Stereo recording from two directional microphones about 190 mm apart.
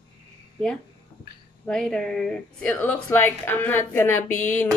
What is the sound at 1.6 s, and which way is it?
A woman's voice, 5° left (ahead or behind).